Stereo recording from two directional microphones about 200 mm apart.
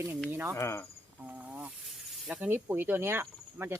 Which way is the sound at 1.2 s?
5° right (ahead or behind).